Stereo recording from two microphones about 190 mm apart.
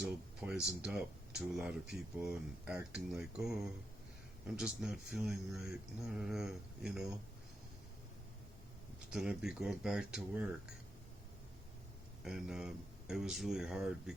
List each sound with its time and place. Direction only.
0.0 s speech: 5° right (ahead or behind)
9.0 s speech: 5° right (ahead or behind)
12.2 s speech: centre (ahead or behind)